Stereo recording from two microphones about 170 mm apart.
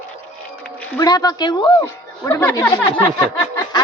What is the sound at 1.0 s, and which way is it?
Speech, 20° left (ahead or behind).